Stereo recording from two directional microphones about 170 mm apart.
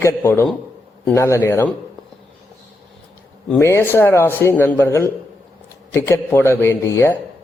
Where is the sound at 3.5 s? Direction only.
15° left (ahead or behind).